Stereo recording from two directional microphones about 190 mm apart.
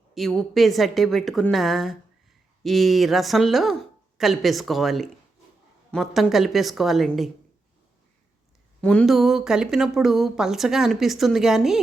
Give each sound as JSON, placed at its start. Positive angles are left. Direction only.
{"t": 0.1, "sound": "speech", "side_deg": 0}
{"t": 8.8, "sound": "speech", "side_deg": 5}